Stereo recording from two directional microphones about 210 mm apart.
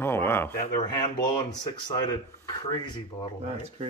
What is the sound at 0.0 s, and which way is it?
Speech, 10° left (ahead or behind).